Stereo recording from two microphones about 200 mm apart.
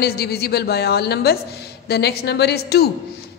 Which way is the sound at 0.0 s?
55° left (ahead or behind).